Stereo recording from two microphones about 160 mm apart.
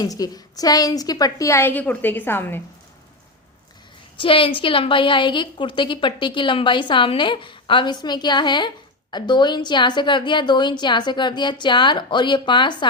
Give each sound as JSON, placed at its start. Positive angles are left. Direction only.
{"t": 0.0, "sound": "a woman's voice", "side_deg": 25}
{"t": 4.2, "sound": "a woman's voice", "side_deg": 35}